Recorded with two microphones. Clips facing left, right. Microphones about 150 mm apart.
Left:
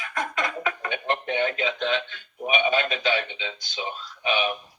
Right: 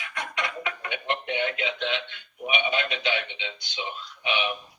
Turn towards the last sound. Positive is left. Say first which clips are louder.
# left 3 dB
turn(degrees=40)  # may be behind; listen again after turning